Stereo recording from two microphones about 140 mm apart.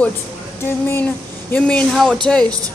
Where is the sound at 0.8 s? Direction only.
15° left (ahead or behind).